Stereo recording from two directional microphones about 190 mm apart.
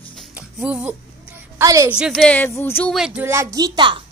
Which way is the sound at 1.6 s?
15° right (ahead or behind).